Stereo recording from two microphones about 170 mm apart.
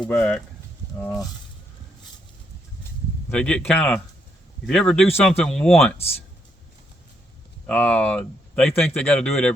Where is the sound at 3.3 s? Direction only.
5° left (ahead or behind).